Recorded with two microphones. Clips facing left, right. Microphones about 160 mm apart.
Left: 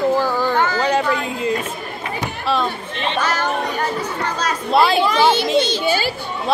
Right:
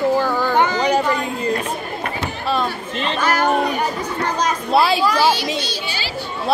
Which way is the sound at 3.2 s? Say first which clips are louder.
Right 4 dB; 10° right (ahead or behind).